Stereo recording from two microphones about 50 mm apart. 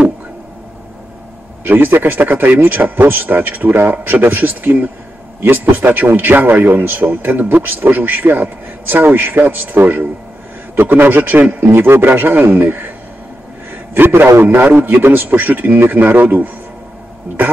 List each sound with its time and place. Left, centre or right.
1.6 s a man's voice: right
11.6 s a man's voice: right
13.9 s a man's voice: right
14.6 s a man's voice: right